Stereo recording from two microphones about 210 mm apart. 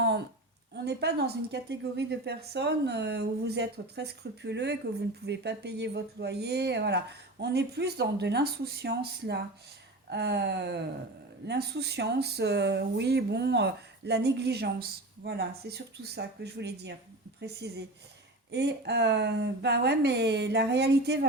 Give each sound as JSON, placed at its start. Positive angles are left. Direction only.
{"t": 0.9, "sound": "a woman's voice", "side_deg": -50}